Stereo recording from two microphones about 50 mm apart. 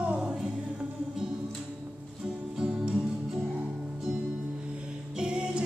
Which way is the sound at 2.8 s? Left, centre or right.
Centre.